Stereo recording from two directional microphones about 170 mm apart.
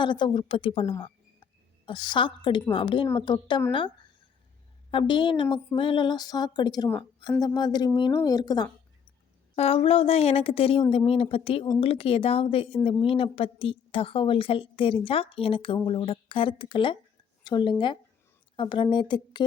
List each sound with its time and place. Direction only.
0.0 s a woman's voice: 25° left (ahead or behind)
9.6 s a woman's voice: 35° left (ahead or behind)